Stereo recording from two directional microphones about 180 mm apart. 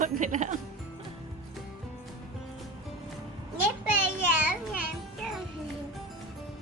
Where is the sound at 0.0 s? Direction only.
45° right (ahead or behind).